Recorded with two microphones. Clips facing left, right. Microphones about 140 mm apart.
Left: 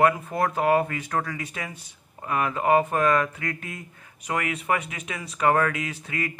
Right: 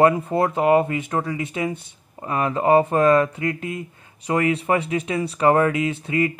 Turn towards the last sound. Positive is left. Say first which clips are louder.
# right 9 dB
turn(degrees=-25)  # may be behind; listen again after turning